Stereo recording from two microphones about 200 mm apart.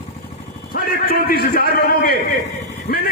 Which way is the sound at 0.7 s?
50° left (ahead or behind).